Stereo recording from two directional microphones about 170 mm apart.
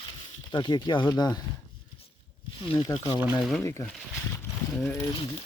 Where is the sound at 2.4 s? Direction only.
30° left (ahead or behind).